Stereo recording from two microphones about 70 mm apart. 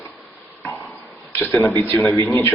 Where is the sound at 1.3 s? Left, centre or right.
Left.